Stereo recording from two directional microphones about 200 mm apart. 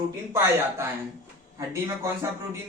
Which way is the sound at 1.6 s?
15° right (ahead or behind).